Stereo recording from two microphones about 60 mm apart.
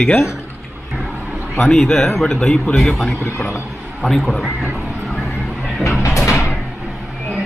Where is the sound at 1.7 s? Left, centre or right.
Centre.